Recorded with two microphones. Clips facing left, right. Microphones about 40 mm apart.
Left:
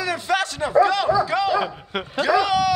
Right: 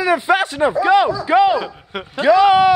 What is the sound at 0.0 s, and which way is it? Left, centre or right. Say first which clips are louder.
Speech: right 7 dB; right.